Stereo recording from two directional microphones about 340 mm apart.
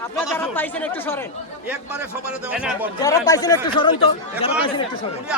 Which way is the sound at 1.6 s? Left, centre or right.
Centre.